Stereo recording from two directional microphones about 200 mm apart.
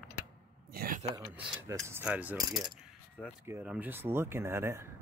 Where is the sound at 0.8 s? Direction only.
45° right (ahead or behind).